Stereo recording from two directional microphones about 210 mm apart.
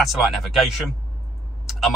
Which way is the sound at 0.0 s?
Centre (ahead or behind).